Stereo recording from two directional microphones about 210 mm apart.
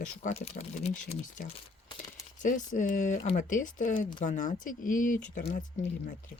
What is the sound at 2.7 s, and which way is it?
Speech, 40° left (ahead or behind).